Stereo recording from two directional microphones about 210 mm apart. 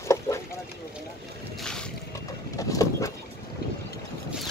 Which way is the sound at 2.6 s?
15° left (ahead or behind).